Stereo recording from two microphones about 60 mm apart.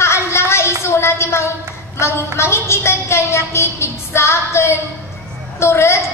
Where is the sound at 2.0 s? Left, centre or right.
Left.